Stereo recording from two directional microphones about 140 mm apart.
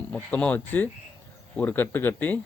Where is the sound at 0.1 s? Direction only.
10° left (ahead or behind).